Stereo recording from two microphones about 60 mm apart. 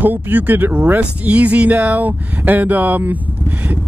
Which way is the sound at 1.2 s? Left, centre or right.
Right.